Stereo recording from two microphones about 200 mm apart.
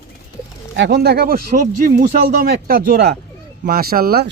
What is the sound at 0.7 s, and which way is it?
Speech, 60° right (ahead or behind).